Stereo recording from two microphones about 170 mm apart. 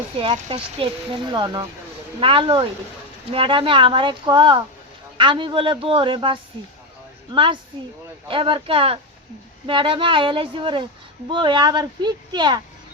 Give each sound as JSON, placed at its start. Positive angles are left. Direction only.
{"t": 0.2, "sound": "speech", "side_deg": -35}